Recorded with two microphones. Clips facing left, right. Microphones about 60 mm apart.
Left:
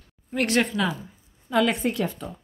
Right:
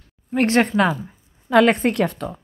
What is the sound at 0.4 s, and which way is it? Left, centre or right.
Speech, right.